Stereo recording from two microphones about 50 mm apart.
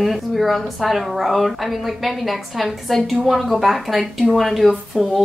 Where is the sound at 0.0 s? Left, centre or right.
Centre.